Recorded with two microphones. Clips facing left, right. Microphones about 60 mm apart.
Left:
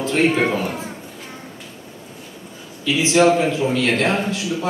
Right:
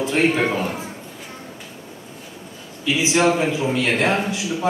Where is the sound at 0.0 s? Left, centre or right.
Centre.